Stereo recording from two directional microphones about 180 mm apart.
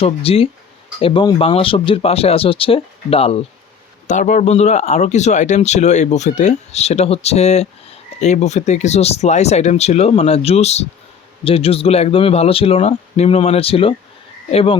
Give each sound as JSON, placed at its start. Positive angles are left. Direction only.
{"t": 0.0, "sound": "speech", "side_deg": 35}